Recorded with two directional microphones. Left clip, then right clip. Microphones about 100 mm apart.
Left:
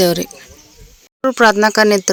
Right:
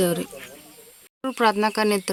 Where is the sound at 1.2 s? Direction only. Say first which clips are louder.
Left 12 dB; 40° left (ahead or behind).